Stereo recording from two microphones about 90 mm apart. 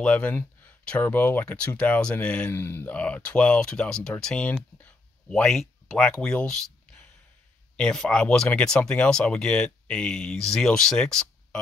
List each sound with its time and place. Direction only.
0.0 s speech: 15° left (ahead or behind)
2.6 s speech: 25° left (ahead or behind); by 11.2 s 5° left (ahead or behind)